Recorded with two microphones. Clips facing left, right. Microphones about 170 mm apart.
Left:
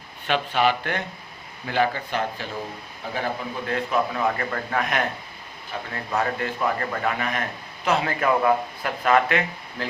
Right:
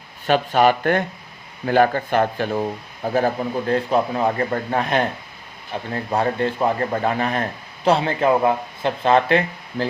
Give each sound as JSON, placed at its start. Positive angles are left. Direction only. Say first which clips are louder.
{"t": 0.3, "sound": "a man's voice", "louder": "right 6 dB", "side_deg": -40}